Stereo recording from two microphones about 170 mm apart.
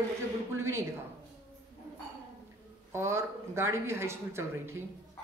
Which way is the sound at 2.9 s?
15° right (ahead or behind).